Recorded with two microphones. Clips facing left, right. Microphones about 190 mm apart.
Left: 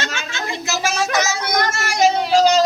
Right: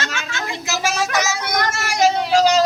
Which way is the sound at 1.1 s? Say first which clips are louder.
Left 1 dB; 10° right (ahead or behind).